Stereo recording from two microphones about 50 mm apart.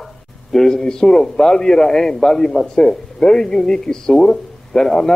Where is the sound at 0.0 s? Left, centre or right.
Centre.